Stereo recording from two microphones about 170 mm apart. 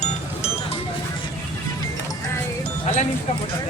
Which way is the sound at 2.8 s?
45° left (ahead or behind).